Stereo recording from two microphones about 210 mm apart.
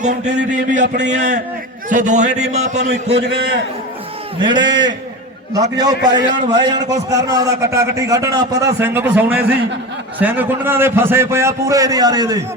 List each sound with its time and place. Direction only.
0.0 s a man's voice: 35° right (ahead or behind)
4.4 s a man's voice: 20° right (ahead or behind)